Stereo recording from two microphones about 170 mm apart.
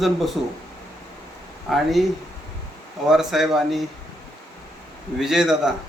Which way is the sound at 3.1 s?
Centre (ahead or behind).